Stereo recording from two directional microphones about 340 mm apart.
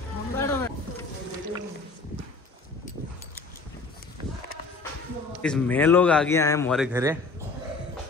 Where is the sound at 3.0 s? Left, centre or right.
Right.